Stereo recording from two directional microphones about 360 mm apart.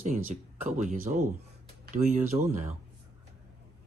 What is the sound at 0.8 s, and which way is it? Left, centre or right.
Speech, right.